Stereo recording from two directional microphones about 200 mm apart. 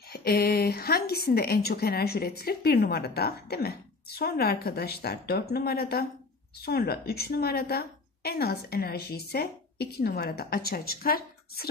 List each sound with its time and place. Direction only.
0.1 s a woman's voice: 50° left (ahead or behind)